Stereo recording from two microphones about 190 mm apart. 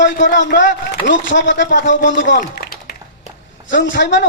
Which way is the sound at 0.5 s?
75° left (ahead or behind).